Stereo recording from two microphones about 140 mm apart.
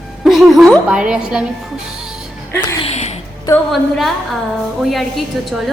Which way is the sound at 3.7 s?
Centre (ahead or behind).